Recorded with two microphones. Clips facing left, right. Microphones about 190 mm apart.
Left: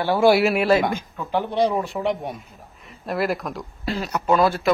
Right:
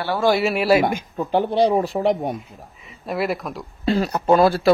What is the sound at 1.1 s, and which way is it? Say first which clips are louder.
Speech: right 4 dB; 30° right (ahead or behind).